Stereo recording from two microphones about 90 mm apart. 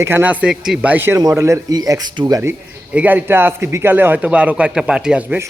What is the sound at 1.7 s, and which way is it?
Speech, 45° right (ahead or behind).